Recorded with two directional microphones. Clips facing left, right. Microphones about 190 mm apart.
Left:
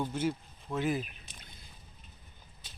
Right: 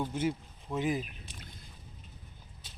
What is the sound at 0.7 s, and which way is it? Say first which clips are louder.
Speech: even; 15° right (ahead or behind).